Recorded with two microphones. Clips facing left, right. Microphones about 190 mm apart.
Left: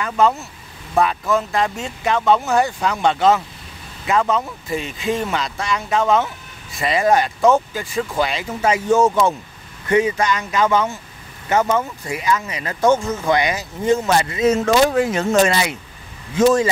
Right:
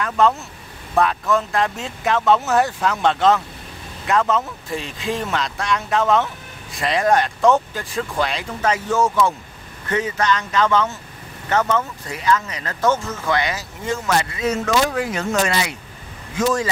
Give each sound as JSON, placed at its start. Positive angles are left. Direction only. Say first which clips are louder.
{"t": 0.0, "sound": "speech", "louder": "even", "side_deg": 0}